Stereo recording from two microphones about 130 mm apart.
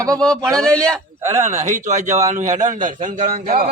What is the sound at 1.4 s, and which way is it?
A man's voice, 60° right (ahead or behind).